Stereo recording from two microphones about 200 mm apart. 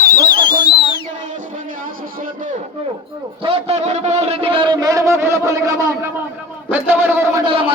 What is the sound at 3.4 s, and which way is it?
A man's voice, 30° right (ahead or behind).